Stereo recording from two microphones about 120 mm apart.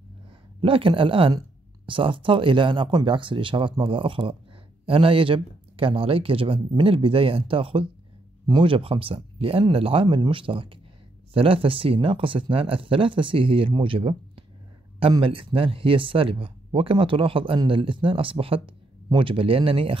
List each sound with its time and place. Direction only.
0.6 s speech: 50° right (ahead or behind)